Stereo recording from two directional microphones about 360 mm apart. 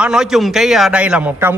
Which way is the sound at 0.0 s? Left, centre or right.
Centre.